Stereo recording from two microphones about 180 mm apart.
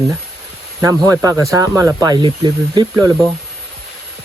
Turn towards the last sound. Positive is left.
turn(degrees=-25)  # may be behind; listen again after turning